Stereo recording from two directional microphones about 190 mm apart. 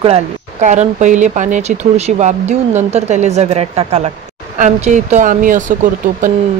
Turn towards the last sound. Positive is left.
turn(degrees=-45)  # may be behind; listen again after turning